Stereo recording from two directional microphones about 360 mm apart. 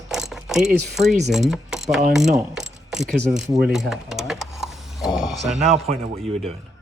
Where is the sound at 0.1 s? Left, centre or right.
Centre.